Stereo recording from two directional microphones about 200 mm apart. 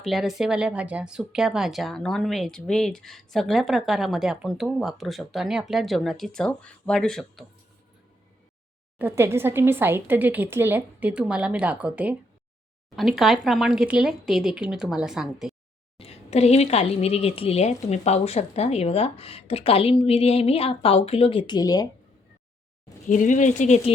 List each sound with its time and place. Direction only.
0.0 s speech: centre (ahead or behind)
9.0 s a woman's voice: 10° right (ahead or behind)
16.0 s speech: 30° left (ahead or behind)
23.0 s speech: 40° left (ahead or behind)